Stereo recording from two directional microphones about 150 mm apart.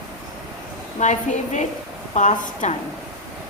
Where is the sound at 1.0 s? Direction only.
50° left (ahead or behind).